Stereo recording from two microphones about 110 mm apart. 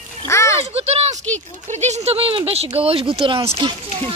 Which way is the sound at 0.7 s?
70° right (ahead or behind).